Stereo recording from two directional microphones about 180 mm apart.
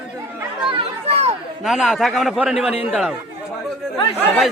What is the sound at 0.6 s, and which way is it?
Chatter, 30° right (ahead or behind).